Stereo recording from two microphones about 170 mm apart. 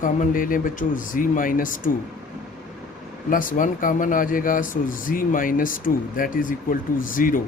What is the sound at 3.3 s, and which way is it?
Speech, 50° left (ahead or behind).